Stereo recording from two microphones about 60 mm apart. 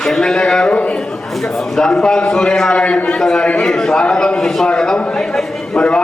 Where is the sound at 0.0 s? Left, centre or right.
Centre.